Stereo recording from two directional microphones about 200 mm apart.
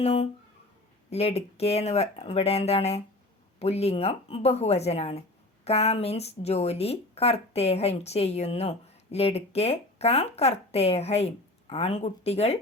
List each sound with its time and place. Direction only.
0.0 s speech: 30° left (ahead or behind)